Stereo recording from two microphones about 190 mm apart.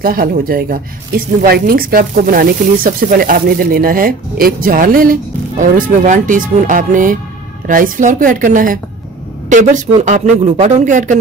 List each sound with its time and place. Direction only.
0.0 s a woman's voice: 50° right (ahead or behind)